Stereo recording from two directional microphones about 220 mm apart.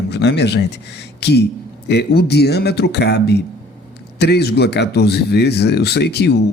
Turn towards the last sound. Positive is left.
turn(degrees=50)  # may be behind; listen again after turning